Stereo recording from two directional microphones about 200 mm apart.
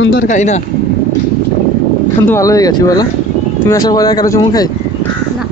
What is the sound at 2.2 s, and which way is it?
A man's voice, 15° left (ahead or behind).